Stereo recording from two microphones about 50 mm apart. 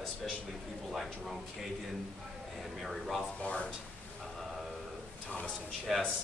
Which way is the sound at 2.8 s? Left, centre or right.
Centre.